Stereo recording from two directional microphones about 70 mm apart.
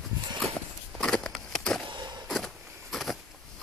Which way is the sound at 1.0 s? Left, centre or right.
Centre.